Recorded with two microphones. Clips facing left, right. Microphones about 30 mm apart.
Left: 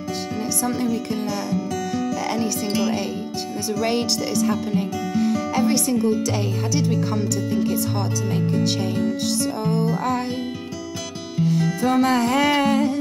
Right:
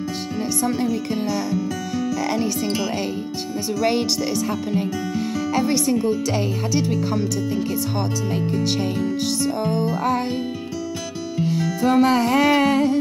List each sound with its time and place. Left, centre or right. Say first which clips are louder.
0.8 s music: right 1 dB; centre
2.3 s speech: right 1 dB; centre
9.4 s music: right 1 dB; centre
11.6 s speech: right 3 dB; centre